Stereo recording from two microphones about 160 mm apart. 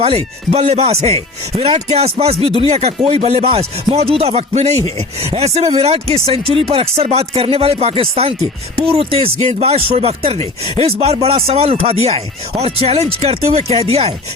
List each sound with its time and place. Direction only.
0.0 s speech: 40° right (ahead or behind)